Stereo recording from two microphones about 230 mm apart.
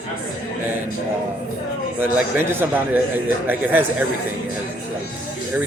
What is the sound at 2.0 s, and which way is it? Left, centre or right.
Speech, centre.